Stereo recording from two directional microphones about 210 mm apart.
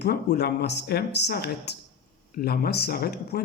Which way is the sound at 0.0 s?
50° left (ahead or behind).